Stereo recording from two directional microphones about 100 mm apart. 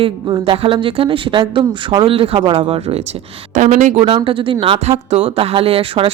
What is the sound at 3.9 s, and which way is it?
A woman's voice, 65° right (ahead or behind).